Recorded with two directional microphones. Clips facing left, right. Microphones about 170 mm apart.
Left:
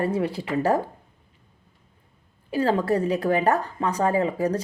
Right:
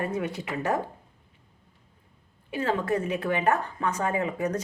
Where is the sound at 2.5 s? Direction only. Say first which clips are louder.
Left 5 dB; 35° left (ahead or behind).